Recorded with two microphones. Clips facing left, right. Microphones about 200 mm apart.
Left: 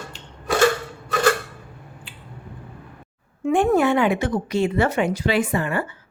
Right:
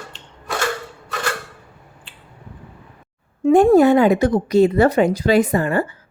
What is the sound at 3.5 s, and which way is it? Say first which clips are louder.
A woman's voice: right 7 dB; 40° right (ahead or behind).